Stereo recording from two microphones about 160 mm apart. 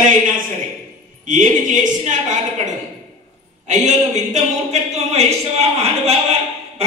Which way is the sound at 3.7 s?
50° right (ahead or behind).